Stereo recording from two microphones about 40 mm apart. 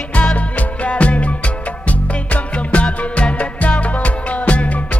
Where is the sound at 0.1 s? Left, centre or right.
Left.